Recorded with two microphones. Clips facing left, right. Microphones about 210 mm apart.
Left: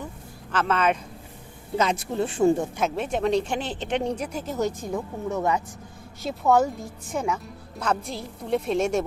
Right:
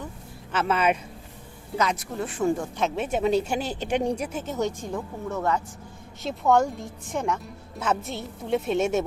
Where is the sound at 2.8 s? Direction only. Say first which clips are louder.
Even; centre (ahead or behind).